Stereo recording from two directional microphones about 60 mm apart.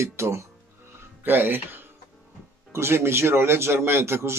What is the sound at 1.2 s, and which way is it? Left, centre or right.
Speech, right.